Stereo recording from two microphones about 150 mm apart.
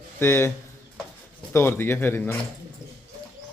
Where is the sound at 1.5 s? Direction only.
15° left (ahead or behind).